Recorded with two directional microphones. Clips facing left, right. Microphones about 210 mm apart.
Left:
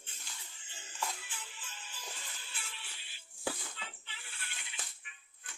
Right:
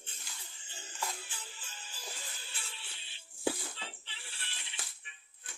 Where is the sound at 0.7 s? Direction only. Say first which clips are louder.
Even; 35° right (ahead or behind).